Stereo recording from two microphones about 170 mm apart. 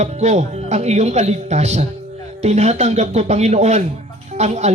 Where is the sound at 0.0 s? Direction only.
40° right (ahead or behind).